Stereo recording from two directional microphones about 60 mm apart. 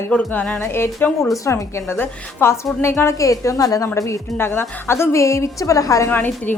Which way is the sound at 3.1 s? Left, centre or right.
Left.